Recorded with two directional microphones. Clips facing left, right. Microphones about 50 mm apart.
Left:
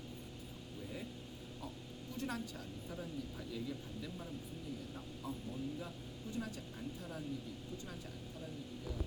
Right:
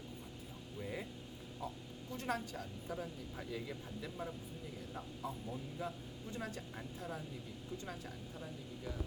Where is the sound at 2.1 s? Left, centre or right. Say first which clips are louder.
Right 3 dB; right.